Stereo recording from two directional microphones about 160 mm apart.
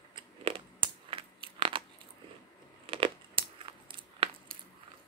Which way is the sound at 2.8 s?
35° right (ahead or behind).